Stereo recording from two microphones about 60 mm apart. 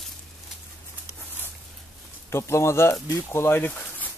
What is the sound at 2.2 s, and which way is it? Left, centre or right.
Speech, left.